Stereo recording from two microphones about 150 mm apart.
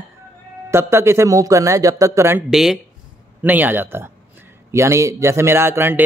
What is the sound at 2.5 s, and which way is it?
A man's voice, 5° right (ahead or behind).